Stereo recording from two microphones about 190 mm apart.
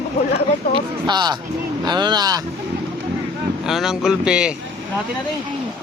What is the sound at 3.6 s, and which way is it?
Speech, centre (ahead or behind).